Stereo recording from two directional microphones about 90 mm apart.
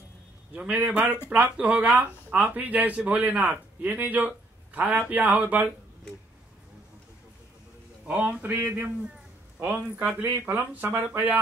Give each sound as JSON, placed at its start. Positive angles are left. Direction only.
{"t": 0.6, "sound": "speech", "side_deg": -15}
{"t": 8.1, "sound": "speech", "side_deg": -20}